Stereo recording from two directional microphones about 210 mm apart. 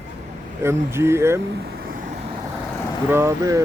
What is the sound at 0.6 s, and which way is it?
Speech, 10° right (ahead or behind).